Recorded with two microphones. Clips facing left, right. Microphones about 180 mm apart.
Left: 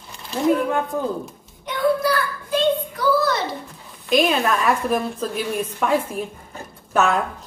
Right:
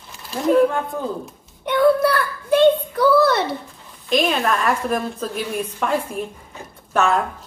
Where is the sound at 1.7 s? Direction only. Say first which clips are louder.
Right 4 dB; 60° right (ahead or behind).